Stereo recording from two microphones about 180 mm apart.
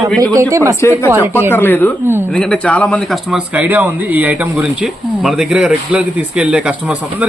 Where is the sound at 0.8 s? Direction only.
15° left (ahead or behind).